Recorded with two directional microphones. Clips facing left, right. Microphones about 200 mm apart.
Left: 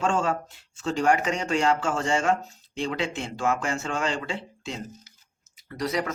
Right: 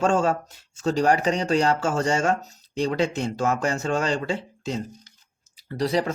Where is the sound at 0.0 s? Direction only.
40° right (ahead or behind).